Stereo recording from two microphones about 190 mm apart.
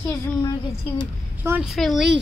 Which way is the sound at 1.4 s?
10° right (ahead or behind).